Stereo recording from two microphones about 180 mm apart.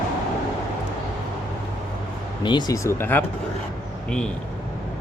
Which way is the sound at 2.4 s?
20° left (ahead or behind).